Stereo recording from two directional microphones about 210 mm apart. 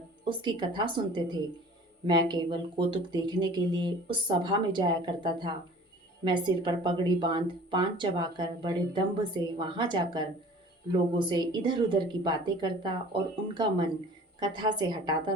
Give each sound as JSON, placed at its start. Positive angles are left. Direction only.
{"t": 0.3, "sound": "speech", "side_deg": -20}